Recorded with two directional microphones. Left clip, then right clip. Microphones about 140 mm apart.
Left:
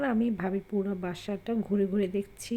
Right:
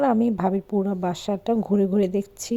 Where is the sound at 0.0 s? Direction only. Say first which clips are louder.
Right 9 dB; 40° right (ahead or behind).